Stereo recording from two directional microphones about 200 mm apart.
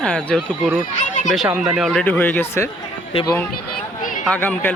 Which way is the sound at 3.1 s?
30° left (ahead or behind).